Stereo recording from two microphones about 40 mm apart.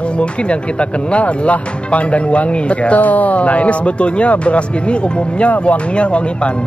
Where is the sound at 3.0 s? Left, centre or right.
Left.